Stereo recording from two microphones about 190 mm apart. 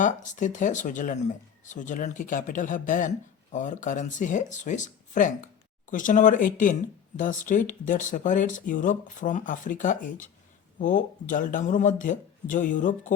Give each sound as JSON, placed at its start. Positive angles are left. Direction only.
{"t": 0.0, "sound": "speech", "side_deg": 40}